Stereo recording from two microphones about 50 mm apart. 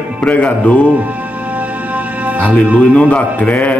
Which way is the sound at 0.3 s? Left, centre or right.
Left.